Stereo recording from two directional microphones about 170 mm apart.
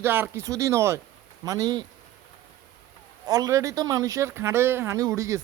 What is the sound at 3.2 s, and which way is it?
Speech, 20° right (ahead or behind).